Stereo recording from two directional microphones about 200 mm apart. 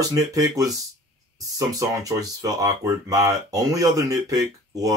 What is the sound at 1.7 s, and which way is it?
Speech, 15° right (ahead or behind).